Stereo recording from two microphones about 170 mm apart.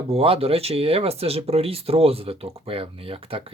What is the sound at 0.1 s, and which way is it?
Speech, 35° right (ahead or behind).